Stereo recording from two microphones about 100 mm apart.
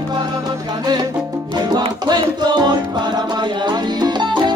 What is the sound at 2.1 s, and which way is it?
Music, 45° right (ahead or behind).